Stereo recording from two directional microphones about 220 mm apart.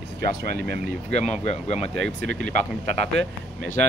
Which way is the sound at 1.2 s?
30° left (ahead or behind).